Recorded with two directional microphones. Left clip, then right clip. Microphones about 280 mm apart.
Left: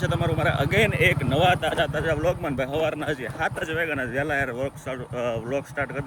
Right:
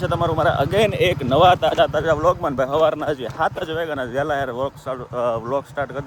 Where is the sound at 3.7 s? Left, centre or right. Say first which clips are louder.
Right 2 dB; right.